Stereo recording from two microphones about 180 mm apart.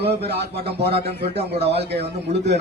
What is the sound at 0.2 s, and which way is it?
Speech, 65° right (ahead or behind).